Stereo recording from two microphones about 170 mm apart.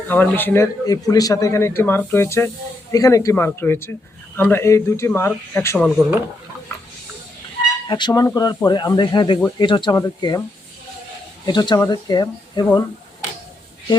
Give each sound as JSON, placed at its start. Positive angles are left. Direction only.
{"t": 0.1, "sound": "speech", "side_deg": 10}
{"t": 7.9, "sound": "speech", "side_deg": 25}
{"t": 11.4, "sound": "speech", "side_deg": 25}